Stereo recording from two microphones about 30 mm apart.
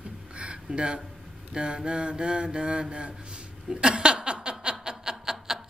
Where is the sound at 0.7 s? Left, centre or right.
Right.